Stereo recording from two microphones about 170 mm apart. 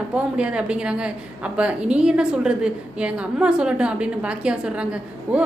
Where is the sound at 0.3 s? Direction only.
5° right (ahead or behind).